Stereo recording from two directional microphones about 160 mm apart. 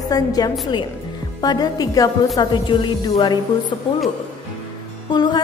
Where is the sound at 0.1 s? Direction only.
25° left (ahead or behind).